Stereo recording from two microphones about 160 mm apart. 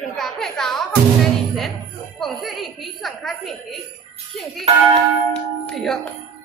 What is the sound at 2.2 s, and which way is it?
Music, centre (ahead or behind).